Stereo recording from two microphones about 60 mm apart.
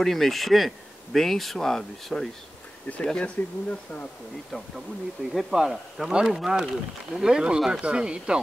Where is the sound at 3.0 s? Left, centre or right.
Centre.